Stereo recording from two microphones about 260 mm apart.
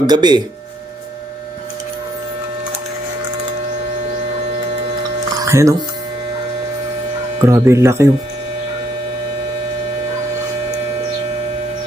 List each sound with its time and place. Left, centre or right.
0.1 s speech: centre
5.4 s music: centre
7.4 s speech: centre